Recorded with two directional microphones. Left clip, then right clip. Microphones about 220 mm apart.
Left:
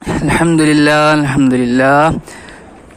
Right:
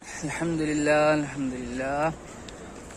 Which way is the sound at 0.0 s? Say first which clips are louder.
Left 18 dB; 35° left (ahead or behind).